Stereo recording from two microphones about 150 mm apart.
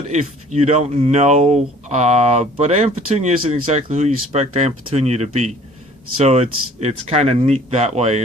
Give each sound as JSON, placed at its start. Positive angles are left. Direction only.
{"t": 0.1, "sound": "speech", "side_deg": -50}